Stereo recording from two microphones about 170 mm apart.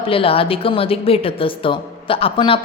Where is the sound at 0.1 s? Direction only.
35° left (ahead or behind).